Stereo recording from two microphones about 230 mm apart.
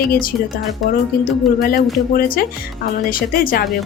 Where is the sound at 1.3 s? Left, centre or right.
Centre.